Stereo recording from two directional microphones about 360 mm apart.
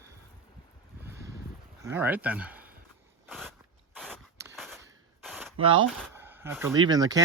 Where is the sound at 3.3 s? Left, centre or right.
Centre.